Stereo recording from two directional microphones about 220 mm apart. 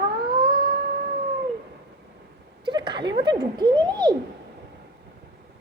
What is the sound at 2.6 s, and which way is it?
Speech, 20° right (ahead or behind).